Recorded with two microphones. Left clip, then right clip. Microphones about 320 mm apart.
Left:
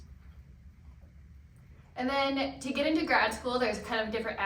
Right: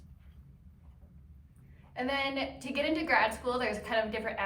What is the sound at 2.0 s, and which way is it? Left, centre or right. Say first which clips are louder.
A woman's voice: left 2 dB; right.